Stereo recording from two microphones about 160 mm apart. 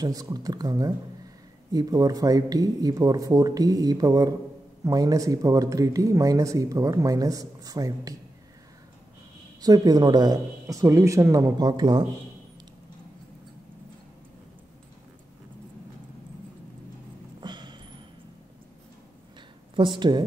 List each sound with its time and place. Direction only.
0.0 s speech: 25° right (ahead or behind)
9.6 s speech: 25° right (ahead or behind)
17.4 s a sound: 30° right (ahead or behind)
19.7 s speech: 30° right (ahead or behind)